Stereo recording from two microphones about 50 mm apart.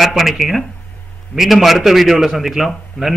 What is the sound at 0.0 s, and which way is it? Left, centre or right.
A man's voice, centre.